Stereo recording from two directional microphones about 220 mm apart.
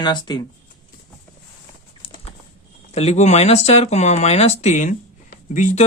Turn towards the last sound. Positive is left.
turn(degrees=35)  # may be behind; listen again after turning